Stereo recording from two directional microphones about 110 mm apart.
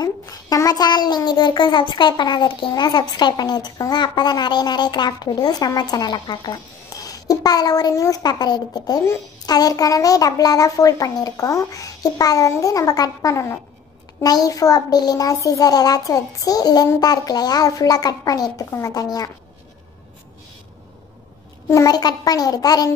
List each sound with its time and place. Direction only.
0.0 s a child's voice: 35° left (ahead or behind)
21.6 s a child's voice: 30° left (ahead or behind)